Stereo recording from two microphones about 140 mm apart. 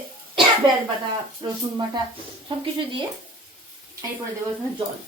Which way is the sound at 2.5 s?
40° right (ahead or behind).